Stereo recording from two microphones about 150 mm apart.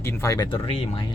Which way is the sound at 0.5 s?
35° left (ahead or behind).